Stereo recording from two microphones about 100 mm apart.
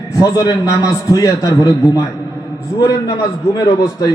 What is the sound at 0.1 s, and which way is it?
A man's voice, 35° left (ahead or behind).